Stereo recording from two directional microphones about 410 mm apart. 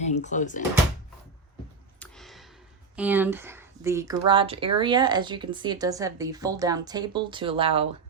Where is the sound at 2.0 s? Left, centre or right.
Centre.